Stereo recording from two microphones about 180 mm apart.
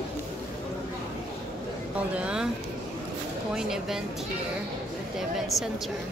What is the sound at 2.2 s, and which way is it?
Speech, 5° right (ahead or behind).